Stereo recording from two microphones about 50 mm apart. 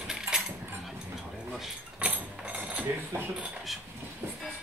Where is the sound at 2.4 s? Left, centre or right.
Right.